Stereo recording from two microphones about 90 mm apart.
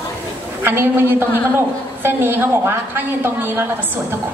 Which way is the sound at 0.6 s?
25° right (ahead or behind).